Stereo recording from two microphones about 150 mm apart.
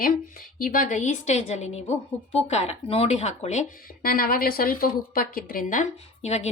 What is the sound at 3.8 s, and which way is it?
Speech, 75° left (ahead or behind).